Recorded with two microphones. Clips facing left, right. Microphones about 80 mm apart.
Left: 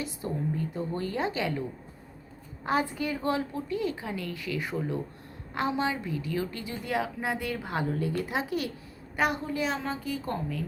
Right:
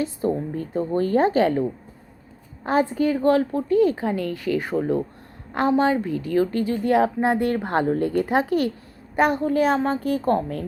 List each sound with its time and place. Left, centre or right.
0.0 s a woman's voice: right
2.9 s a woman's voice: right
3.2 s speech: right